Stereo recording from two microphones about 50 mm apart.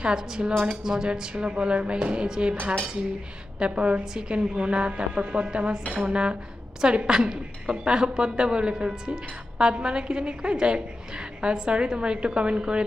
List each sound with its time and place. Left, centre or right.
0.0 s a woman's voice: centre